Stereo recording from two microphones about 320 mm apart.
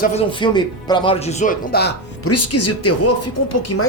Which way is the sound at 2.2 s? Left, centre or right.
Left.